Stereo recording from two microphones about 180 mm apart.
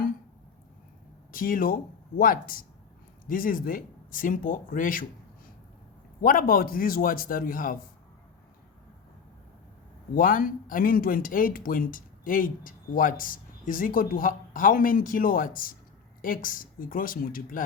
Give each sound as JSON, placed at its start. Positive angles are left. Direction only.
{"t": 1.3, "sound": "speech", "side_deg": 50}
{"t": 6.2, "sound": "speech", "side_deg": 50}
{"t": 10.2, "sound": "speech", "side_deg": 50}